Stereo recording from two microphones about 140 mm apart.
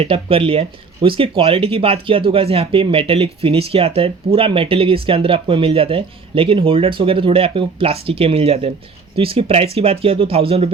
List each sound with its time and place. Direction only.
0.0 s speech: 40° right (ahead or behind)